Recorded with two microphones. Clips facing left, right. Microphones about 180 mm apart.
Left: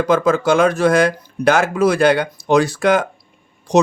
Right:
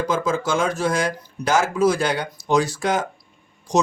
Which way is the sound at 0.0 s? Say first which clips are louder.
Left 7 dB; 65° left (ahead or behind).